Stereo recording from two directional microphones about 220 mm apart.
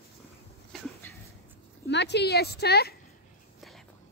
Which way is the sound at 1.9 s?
50° left (ahead or behind).